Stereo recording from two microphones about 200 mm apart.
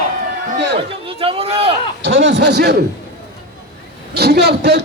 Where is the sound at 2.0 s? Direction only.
65° right (ahead or behind).